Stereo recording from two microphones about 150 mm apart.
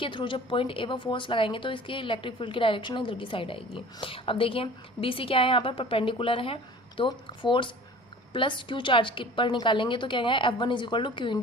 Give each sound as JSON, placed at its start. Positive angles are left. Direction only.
{"t": 0.0, "sound": "a woman's voice", "side_deg": 35}